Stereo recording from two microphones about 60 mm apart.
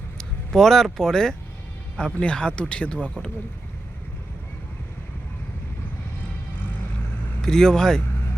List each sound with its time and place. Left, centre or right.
0.2 s vehicle: centre
0.9 s speech: centre
7.4 s speech: centre